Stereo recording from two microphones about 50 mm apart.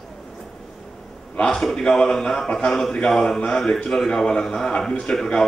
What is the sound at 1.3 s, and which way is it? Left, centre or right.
A man's voice, centre.